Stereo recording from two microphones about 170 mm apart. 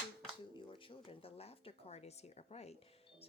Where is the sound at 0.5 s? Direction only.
30° left (ahead or behind).